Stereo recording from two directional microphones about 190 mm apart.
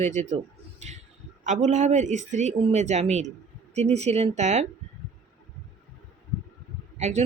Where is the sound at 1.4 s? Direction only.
40° right (ahead or behind).